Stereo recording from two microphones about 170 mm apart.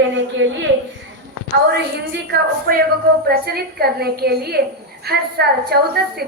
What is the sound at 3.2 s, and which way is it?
A woman's voice, 65° right (ahead or behind).